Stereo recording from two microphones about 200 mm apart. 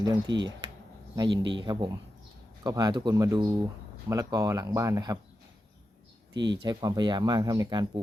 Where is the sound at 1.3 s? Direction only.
65° right (ahead or behind).